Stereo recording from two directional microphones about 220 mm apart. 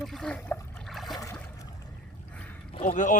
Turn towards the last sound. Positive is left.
turn(degrees=35)  # may be behind; listen again after turning